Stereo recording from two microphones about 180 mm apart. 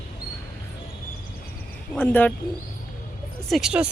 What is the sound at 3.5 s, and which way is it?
Speech, 5° right (ahead or behind).